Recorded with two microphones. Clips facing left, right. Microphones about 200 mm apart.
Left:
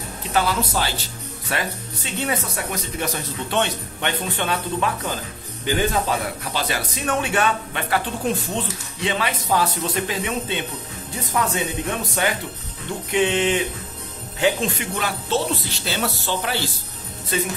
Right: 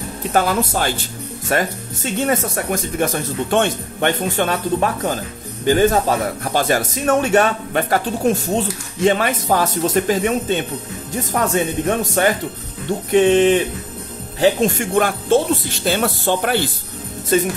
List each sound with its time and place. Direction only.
0.3 s speech: 50° right (ahead or behind)